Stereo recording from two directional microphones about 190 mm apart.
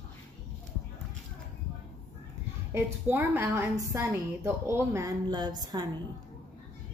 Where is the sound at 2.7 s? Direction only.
10° right (ahead or behind).